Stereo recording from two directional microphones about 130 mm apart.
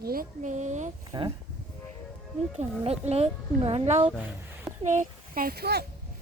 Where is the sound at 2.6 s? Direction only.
55° right (ahead or behind).